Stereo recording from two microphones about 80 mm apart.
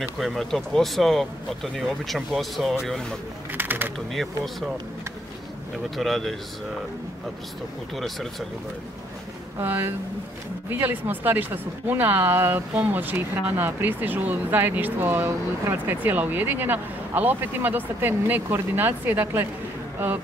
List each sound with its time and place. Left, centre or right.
0.0 s speech: centre
3.5 s speech: right
4.1 s speech: centre
5.9 s speech: centre
7.9 s speech: centre
9.6 s speech: right